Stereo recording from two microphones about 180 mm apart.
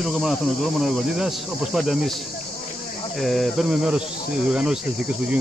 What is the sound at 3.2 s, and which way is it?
Speech, centre (ahead or behind).